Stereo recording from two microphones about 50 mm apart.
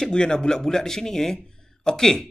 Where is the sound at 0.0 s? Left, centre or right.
Centre.